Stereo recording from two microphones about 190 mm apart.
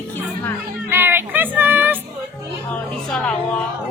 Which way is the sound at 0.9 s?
10° right (ahead or behind).